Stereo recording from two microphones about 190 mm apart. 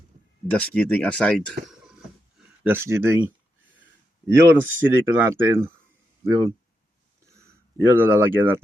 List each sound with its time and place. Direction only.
0.5 s speech: 5° left (ahead or behind)
2.6 s speech: 15° right (ahead or behind)
4.3 s speech: 15° right (ahead or behind)
7.9 s speech: 10° right (ahead or behind)